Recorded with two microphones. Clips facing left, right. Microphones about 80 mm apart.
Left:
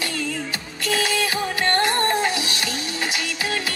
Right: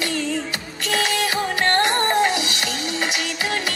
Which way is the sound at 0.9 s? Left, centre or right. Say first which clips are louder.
Right 1 dB; right.